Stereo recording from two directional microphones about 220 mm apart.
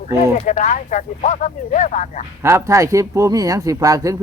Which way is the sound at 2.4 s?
15° right (ahead or behind).